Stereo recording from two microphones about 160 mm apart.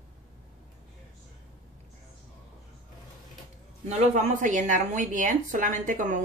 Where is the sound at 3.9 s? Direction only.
50° right (ahead or behind).